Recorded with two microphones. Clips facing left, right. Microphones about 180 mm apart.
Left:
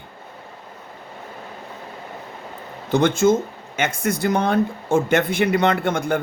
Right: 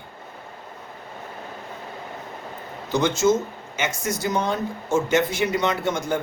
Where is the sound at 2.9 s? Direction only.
55° left (ahead or behind).